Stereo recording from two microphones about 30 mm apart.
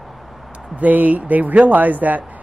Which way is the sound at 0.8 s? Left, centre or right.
Right.